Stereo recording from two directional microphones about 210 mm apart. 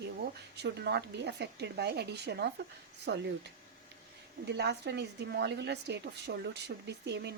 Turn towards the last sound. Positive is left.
turn(degrees=-55)  # may be behind; listen again after turning